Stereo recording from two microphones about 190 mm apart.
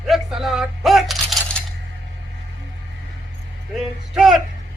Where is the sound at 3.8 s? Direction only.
Centre (ahead or behind).